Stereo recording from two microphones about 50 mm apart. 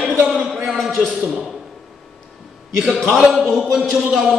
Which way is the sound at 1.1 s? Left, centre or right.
Centre.